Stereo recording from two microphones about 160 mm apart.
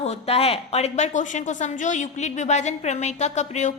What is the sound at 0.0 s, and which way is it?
A woman's voice, 40° left (ahead or behind).